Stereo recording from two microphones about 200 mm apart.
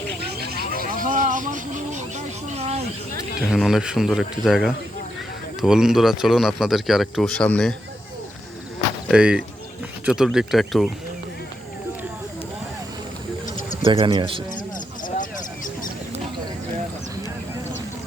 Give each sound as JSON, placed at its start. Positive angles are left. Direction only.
{"t": 0.2, "sound": "vehicle", "side_deg": -50}
{"t": 0.9, "sound": "a sound", "side_deg": -40}
{"t": 3.5, "sound": "speech", "side_deg": 0}
{"t": 9.0, "sound": "speech", "side_deg": -5}
{"t": 14.0, "sound": "speech", "side_deg": -25}
{"t": 15.0, "sound": "a sound", "side_deg": 40}